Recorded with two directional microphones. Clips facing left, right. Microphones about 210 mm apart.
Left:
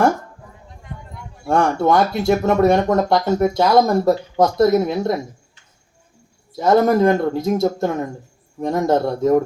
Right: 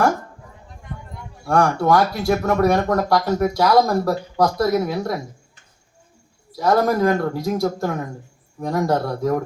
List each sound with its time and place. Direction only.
1.5 s speech: 25° left (ahead or behind)
6.6 s speech: 25° left (ahead or behind)